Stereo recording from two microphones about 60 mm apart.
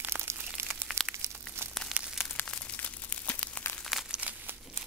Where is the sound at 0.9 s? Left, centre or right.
Centre.